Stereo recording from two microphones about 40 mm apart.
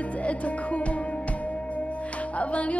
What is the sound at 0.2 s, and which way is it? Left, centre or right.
Music, left.